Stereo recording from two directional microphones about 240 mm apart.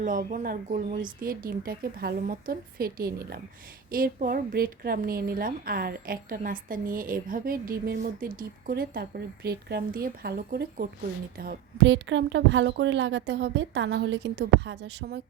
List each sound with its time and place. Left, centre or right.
0.0 s a woman's voice: right